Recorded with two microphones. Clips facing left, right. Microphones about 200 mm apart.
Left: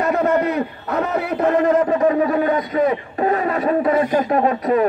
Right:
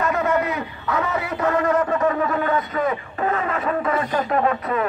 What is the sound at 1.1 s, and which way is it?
Music, 60° left (ahead or behind).